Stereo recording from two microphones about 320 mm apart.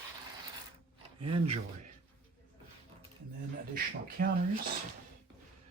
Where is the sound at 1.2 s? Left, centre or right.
Centre.